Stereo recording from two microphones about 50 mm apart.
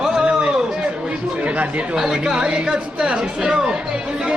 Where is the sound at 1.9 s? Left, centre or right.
Centre.